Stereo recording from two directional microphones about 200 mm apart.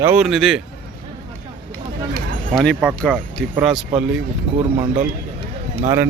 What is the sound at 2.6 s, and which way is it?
Speech, centre (ahead or behind).